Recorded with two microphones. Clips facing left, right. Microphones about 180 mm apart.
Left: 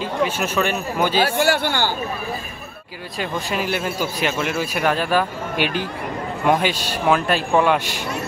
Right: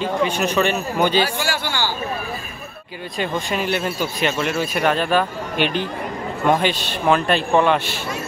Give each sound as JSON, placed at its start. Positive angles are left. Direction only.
{"t": 0.0, "sound": "speech", "side_deg": 0}
{"t": 1.2, "sound": "a man's voice", "side_deg": 60}
{"t": 3.2, "sound": "speech", "side_deg": 5}